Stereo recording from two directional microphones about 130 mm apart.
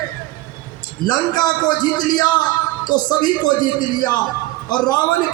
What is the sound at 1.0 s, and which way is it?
A man's voice, 30° left (ahead or behind).